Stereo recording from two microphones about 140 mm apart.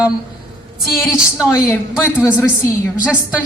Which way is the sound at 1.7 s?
20° left (ahead or behind).